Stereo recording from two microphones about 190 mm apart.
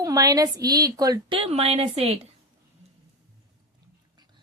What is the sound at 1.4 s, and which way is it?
Speech, 30° right (ahead or behind).